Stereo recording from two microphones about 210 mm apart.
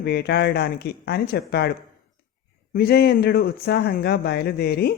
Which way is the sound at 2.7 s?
45° left (ahead or behind).